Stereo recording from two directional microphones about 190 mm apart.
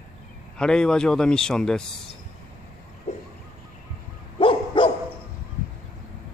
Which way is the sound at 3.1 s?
40° left (ahead or behind).